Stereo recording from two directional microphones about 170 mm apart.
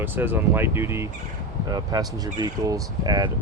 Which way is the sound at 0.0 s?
10° right (ahead or behind).